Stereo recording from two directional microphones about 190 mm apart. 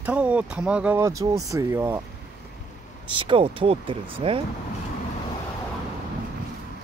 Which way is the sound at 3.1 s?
25° right (ahead or behind).